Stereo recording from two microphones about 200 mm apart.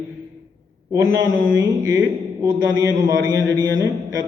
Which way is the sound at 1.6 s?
20° right (ahead or behind).